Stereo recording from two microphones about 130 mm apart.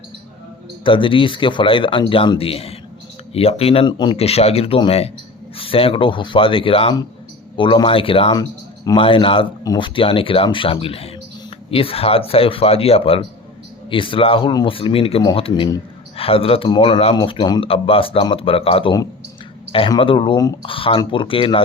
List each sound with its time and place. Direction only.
0.9 s speech: 40° left (ahead or behind)
3.9 s speech: 35° left (ahead or behind)
4.2 s speech: 50° left (ahead or behind)
8.4 s a sound: 30° left (ahead or behind)
9.0 s speech: 45° left (ahead or behind)
20.0 s speech: 40° left (ahead or behind)
20.7 s speech: 45° left (ahead or behind)